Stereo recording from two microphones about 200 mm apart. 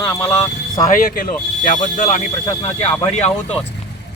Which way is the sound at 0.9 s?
45° left (ahead or behind).